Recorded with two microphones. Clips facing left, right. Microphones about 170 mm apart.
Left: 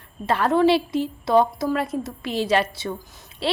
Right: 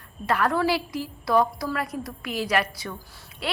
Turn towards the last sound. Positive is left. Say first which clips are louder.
# left 7 dB
turn(degrees=30)  # may be behind; listen again after turning